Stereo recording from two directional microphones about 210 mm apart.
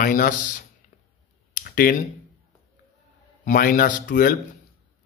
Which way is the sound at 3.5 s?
40° left (ahead or behind).